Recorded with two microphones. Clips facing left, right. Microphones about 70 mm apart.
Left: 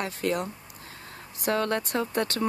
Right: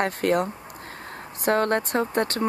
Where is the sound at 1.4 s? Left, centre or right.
Right.